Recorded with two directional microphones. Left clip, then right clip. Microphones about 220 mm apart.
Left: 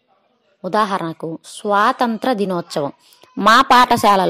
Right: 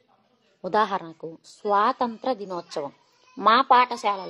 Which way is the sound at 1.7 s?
10° left (ahead or behind).